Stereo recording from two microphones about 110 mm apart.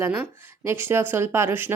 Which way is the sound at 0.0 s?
25° right (ahead or behind).